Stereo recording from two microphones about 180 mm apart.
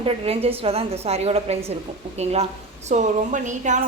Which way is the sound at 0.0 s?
35° right (ahead or behind).